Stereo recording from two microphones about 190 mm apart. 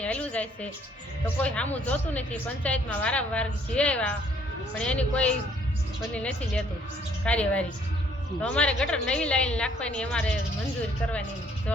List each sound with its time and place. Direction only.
0.0 s music: 5° left (ahead or behind)
1.2 s a woman's voice: 5° left (ahead or behind)